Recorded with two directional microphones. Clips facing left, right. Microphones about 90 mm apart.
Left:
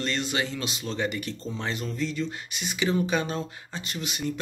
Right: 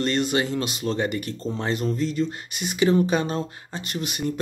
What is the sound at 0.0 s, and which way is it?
Speech, 45° right (ahead or behind).